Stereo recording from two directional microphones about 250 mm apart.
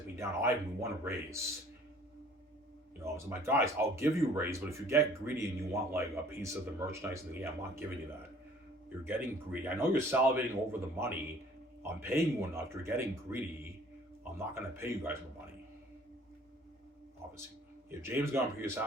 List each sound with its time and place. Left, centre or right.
0.2 s speech: centre
3.0 s speech: centre
9.0 s speech: centre
18.0 s speech: centre